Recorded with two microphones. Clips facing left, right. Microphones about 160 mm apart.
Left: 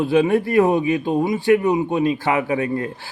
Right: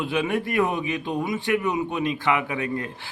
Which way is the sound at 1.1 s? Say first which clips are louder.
Left 7 dB; 25° left (ahead or behind).